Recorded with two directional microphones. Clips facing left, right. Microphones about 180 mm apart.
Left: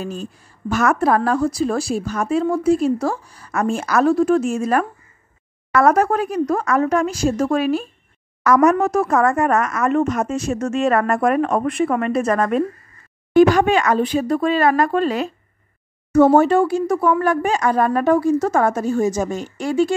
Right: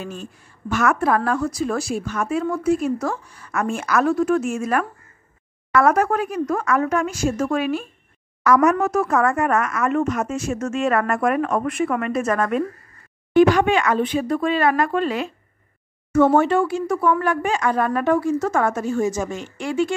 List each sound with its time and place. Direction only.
0.0 s a woman's voice: 35° left (ahead or behind)